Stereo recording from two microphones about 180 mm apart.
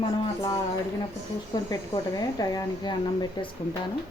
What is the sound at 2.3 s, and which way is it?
Speech, 20° left (ahead or behind).